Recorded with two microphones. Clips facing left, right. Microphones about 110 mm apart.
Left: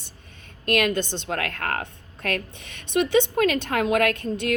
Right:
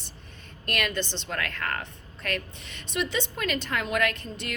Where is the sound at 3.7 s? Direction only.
55° left (ahead or behind).